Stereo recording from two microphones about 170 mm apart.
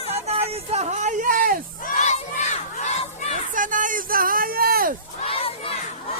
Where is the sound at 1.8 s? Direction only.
50° left (ahead or behind).